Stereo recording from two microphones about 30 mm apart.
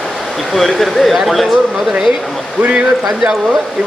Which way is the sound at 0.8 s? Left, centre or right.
Centre.